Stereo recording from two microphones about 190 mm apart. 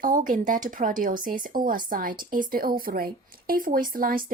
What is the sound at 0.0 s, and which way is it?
Speech, 45° right (ahead or behind).